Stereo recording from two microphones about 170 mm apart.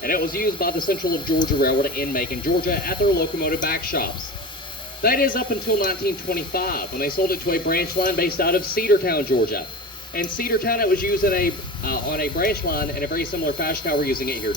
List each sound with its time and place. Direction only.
0.0 s speech: 60° left (ahead or behind)